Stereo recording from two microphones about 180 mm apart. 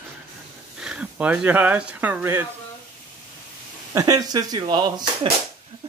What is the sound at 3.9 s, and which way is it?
Speech, 20° right (ahead or behind).